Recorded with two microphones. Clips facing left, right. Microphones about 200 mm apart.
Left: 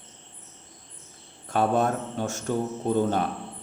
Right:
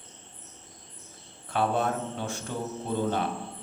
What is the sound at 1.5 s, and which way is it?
Speech, 45° left (ahead or behind).